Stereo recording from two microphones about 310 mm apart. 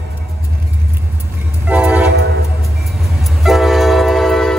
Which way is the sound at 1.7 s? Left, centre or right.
Centre.